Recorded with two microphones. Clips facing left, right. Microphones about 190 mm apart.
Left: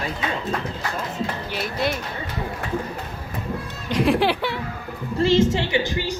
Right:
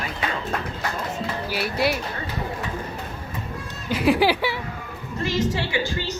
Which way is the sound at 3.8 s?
5° right (ahead or behind).